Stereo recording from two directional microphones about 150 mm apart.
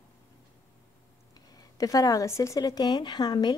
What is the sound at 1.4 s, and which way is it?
A woman's voice, 25° left (ahead or behind).